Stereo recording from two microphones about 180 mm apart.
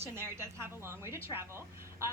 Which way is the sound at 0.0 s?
15° right (ahead or behind).